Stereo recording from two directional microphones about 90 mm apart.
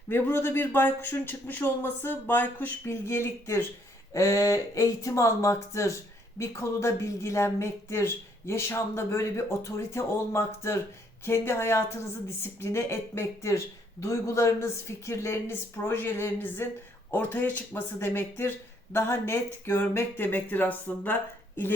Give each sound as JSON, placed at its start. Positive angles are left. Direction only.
{"t": 0.1, "sound": "speech", "side_deg": 25}